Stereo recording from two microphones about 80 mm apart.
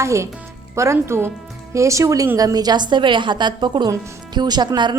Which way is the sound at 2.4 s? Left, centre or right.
Right.